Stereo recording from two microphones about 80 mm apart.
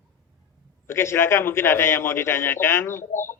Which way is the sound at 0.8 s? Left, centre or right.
Left.